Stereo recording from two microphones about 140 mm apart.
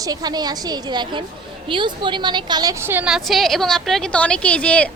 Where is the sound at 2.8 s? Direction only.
15° right (ahead or behind).